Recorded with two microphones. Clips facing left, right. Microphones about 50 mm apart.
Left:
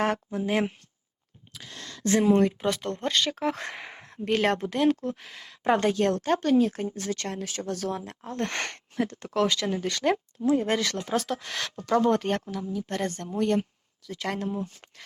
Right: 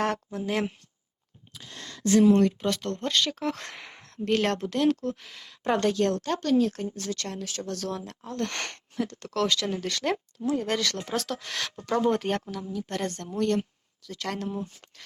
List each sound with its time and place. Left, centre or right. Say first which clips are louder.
0.0 s speech: left 2 dB; centre
2.2 s speech: even; centre
10.5 s speech: left 3 dB; centre
10.9 s speech: left 3 dB; centre